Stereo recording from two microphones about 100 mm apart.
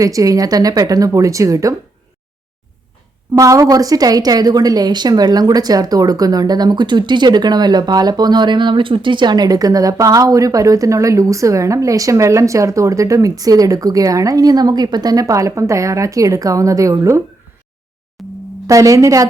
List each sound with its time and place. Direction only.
0.0 s a woman's voice: 35° right (ahead or behind)
3.3 s a woman's voice: 35° right (ahead or behind)
18.2 s a sound: centre (ahead or behind)
18.7 s a woman's voice: 35° right (ahead or behind)